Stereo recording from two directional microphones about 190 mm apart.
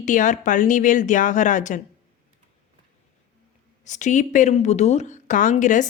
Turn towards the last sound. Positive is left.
turn(degrees=40)  # may be behind; listen again after turning